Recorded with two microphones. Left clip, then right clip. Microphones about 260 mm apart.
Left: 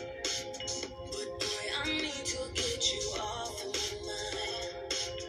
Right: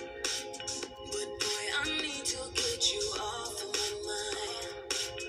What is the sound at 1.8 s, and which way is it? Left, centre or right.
Music, right.